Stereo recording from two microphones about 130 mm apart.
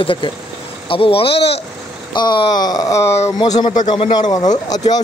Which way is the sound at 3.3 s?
35° left (ahead or behind).